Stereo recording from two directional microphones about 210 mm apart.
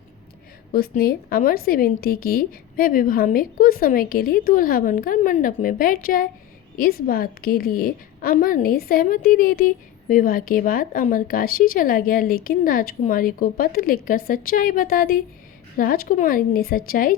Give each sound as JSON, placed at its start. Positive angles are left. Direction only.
{"t": 0.7, "sound": "a woman's voice", "side_deg": 45}